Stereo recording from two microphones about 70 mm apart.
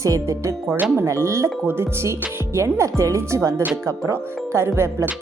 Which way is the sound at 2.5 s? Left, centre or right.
Right.